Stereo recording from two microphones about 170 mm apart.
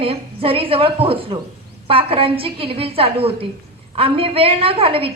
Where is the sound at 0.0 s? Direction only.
30° right (ahead or behind).